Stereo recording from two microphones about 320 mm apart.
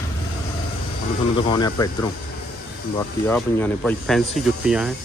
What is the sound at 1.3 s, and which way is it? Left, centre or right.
Speech, centre.